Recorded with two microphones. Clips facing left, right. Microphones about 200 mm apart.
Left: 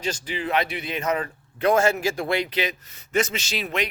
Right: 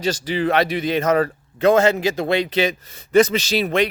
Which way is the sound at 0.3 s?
80° right.